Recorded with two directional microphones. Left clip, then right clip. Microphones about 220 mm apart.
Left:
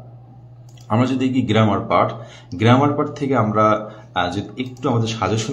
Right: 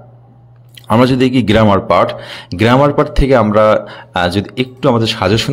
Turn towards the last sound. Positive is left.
turn(degrees=-40)  # may be behind; listen again after turning